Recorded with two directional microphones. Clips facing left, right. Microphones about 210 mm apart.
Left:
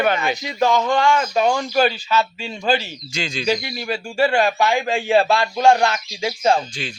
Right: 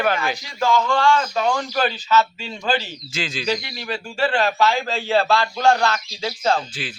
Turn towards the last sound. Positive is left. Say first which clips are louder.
# left 3 dB
turn(degrees=15)  # may be behind; listen again after turning